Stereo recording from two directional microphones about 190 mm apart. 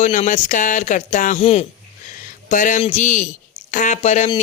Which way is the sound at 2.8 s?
40° left (ahead or behind).